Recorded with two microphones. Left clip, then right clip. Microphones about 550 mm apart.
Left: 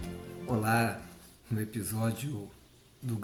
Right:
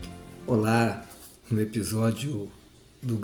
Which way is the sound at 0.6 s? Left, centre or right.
Left.